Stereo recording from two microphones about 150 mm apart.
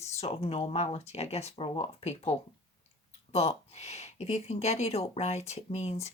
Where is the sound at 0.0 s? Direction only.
45° left (ahead or behind).